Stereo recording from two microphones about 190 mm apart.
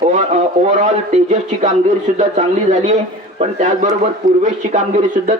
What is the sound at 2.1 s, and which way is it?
Speech, 40° right (ahead or behind).